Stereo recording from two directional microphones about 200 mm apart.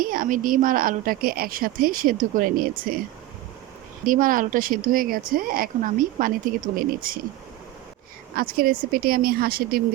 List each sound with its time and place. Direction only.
0.0 s speech: 45° right (ahead or behind)
4.0 s speech: 45° right (ahead or behind)
8.4 s speech: 45° right (ahead or behind)